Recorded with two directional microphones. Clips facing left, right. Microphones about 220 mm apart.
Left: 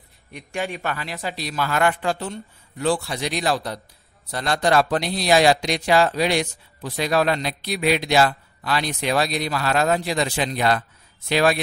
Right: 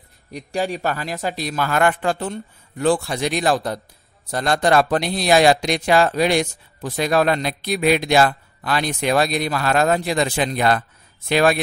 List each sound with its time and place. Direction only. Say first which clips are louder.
0.3 s speech: right 5 dB; 35° right (ahead or behind); by 11.6 s 50° right (ahead or behind)